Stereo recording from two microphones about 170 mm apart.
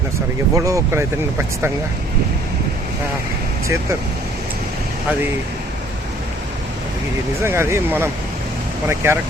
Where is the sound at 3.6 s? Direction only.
15° right (ahead or behind).